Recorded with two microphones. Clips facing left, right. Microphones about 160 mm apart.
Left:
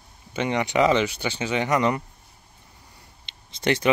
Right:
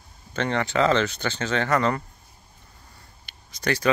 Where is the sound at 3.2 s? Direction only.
25° left (ahead or behind).